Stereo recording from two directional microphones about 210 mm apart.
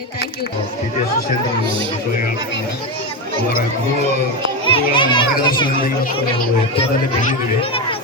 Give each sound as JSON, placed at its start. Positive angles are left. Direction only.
{"t": 4.7, "sound": "a child's voice", "side_deg": 25}
{"t": 7.6, "sound": "chatter", "side_deg": 25}